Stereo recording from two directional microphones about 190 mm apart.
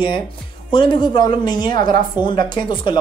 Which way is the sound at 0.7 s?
25° left (ahead or behind).